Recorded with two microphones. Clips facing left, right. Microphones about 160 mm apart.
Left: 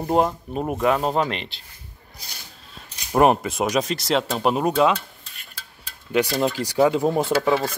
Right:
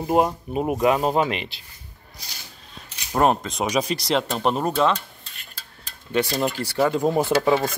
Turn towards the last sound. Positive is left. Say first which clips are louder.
# right 1 dB
turn(degrees=-5)  # may be behind; listen again after turning